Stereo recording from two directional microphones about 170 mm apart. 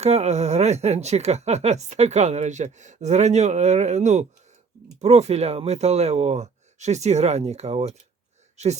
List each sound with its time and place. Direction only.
0.0 s speech: 40° right (ahead or behind)